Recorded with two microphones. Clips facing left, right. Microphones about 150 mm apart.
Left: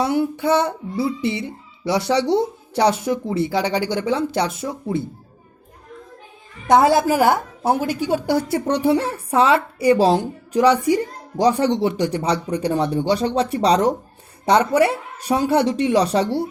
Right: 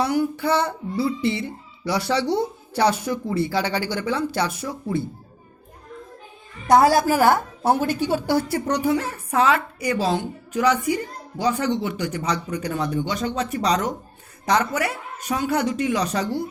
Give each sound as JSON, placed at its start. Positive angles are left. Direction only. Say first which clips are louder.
{"t": 0.0, "sound": "child singing", "louder": "left 2 dB", "side_deg": 25}
{"t": 6.7, "sound": "a woman's voice", "louder": "left 1 dB", "side_deg": 20}